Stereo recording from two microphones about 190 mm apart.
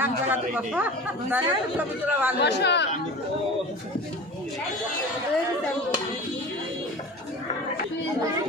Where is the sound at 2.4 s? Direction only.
65° left (ahead or behind).